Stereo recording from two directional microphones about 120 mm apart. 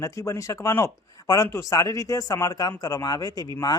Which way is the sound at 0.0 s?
25° left (ahead or behind).